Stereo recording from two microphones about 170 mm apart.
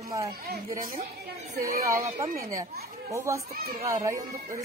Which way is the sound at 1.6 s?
55° right (ahead or behind).